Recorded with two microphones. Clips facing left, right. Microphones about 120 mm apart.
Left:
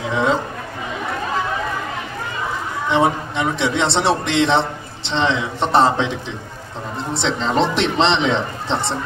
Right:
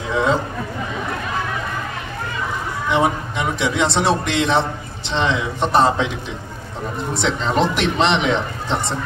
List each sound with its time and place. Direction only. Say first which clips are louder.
2.9 s a man's voice: left 1 dB; 25° left (ahead or behind)
7.2 s a man's voice: left 1 dB; 25° left (ahead or behind)